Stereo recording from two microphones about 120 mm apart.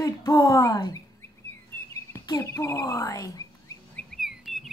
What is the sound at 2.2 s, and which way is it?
A woman's voice, 25° left (ahead or behind).